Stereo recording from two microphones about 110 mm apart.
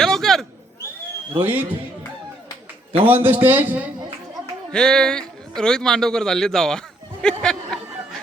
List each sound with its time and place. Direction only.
0.0 s a sound: 5° left (ahead or behind)
1.4 s a man's voice: 20° right (ahead or behind)
3.1 s a man's voice: 20° right (ahead or behind)
4.7 s a man's voice: 5° left (ahead or behind)